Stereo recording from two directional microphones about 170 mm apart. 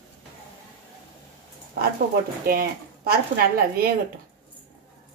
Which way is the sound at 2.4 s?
65° right (ahead or behind).